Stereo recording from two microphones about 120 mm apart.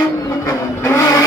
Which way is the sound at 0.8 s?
20° left (ahead or behind).